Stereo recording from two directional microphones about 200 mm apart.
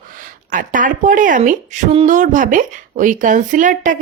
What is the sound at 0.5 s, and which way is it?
Speech, 40° right (ahead or behind).